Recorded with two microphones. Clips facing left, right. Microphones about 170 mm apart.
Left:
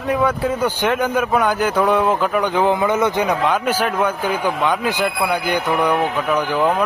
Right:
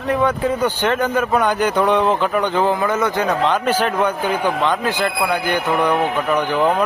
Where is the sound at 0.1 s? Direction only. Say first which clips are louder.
Right 1 dB; 5° left (ahead or behind).